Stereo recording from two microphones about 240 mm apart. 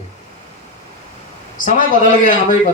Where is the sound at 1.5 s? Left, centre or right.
Left.